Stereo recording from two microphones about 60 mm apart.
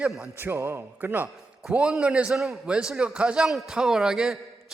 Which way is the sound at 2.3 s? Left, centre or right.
Centre.